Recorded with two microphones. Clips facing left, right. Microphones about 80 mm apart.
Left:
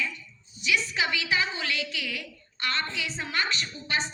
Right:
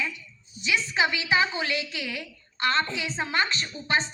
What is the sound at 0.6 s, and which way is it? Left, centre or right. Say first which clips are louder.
A woman's voice: right 2 dB; right.